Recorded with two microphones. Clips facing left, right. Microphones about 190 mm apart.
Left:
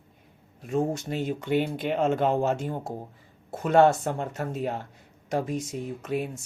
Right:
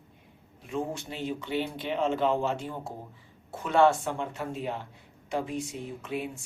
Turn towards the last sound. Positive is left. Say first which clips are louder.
# left 4 dB
turn(degrees=45)  # may be behind; listen again after turning